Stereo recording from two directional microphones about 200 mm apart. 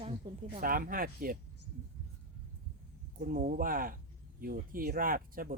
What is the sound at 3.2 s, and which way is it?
Speech, 40° right (ahead or behind).